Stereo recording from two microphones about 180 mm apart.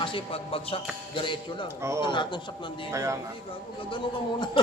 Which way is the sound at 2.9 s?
15° right (ahead or behind).